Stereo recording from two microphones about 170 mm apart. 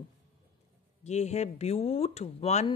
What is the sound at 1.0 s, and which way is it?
Speech, 40° left (ahead or behind).